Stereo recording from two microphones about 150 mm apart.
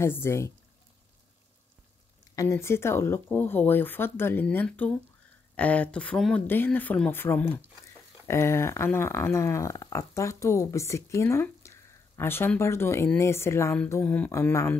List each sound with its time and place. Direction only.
0.0 s speech: 15° left (ahead or behind)
2.3 s speech: 20° left (ahead or behind)